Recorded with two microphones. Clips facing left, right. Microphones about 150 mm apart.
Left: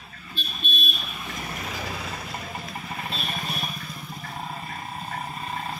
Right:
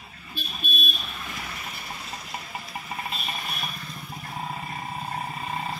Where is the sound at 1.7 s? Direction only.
90° left.